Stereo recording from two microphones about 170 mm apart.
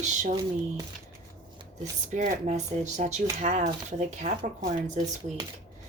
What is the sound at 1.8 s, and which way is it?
Speech, 45° right (ahead or behind).